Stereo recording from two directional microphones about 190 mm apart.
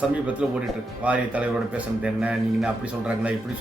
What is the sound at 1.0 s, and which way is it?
Speech, 5° right (ahead or behind).